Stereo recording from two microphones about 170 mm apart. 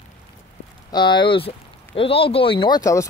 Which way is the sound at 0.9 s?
25° left (ahead or behind).